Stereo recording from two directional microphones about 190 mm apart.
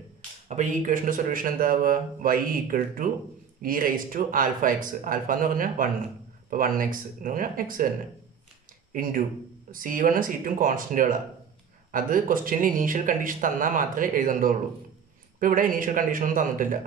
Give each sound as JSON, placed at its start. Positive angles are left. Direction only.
{"t": 0.5, "sound": "speech", "side_deg": -40}
{"t": 8.9, "sound": "speech", "side_deg": -45}